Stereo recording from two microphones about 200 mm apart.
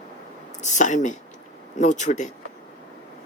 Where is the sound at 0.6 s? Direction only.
35° left (ahead or behind).